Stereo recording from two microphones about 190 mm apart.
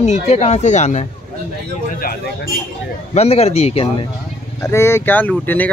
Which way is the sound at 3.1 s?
35° left (ahead or behind).